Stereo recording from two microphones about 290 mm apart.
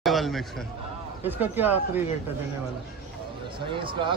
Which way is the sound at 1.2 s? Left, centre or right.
Centre.